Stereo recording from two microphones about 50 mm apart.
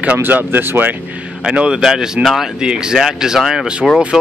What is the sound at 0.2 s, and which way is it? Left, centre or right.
Speech, right.